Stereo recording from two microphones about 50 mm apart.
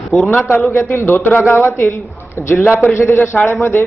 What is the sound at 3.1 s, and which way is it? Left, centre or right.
Speech, left.